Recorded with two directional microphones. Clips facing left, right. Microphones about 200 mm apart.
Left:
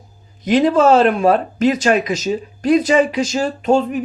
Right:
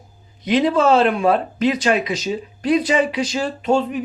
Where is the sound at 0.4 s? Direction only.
45° left (ahead or behind).